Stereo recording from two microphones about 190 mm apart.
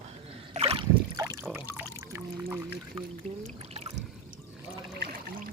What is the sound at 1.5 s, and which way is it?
Water, 10° right (ahead or behind).